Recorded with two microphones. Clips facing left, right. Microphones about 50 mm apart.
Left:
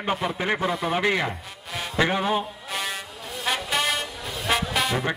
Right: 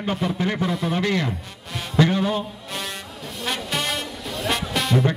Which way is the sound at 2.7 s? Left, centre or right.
Centre.